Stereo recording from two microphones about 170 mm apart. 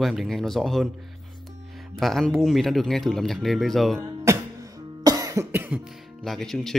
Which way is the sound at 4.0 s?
20° right (ahead or behind).